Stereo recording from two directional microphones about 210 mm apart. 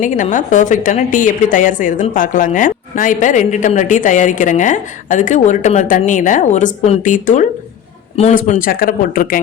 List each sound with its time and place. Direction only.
0.0 s a woman's voice: 40° left (ahead or behind)